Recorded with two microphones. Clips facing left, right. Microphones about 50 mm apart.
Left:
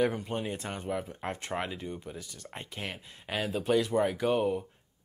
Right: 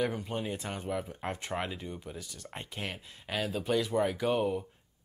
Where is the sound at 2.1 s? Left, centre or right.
Left.